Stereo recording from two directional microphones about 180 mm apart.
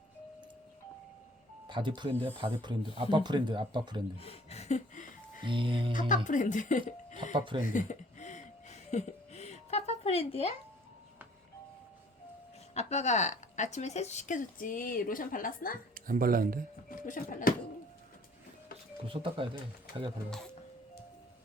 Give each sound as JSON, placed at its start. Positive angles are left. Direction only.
{"t": 1.6, "sound": "speech", "side_deg": -25}
{"t": 4.2, "sound": "a sound", "side_deg": 35}
{"t": 5.5, "sound": "speech", "side_deg": -30}
{"t": 5.9, "sound": "speech", "side_deg": 45}
{"t": 7.3, "sound": "speech", "side_deg": -25}
{"t": 7.6, "sound": "a sound", "side_deg": 45}
{"t": 12.7, "sound": "speech", "side_deg": 40}
{"t": 16.0, "sound": "speech", "side_deg": -50}
{"t": 16.9, "sound": "speech", "side_deg": 50}
{"t": 19.0, "sound": "speech", "side_deg": -30}